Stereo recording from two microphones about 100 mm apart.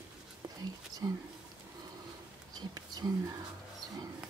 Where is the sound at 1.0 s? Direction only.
40° right (ahead or behind).